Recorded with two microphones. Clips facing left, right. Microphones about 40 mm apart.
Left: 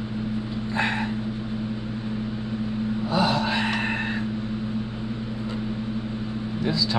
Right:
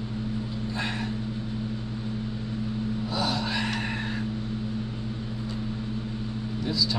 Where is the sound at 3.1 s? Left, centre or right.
Left.